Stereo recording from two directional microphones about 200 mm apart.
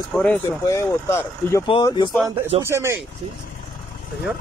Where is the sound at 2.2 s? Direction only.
25° right (ahead or behind).